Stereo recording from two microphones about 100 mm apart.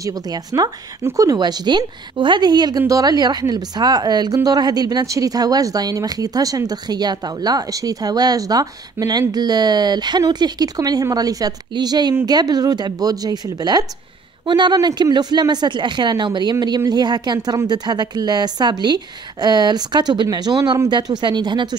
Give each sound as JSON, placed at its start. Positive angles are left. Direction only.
{"t": 0.0, "sound": "a woman's voice", "side_deg": -40}